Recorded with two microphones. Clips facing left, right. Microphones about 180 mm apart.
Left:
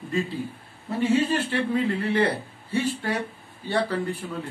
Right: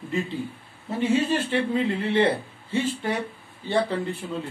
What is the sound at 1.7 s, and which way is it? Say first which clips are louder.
Speech: even; 25° right (ahead or behind).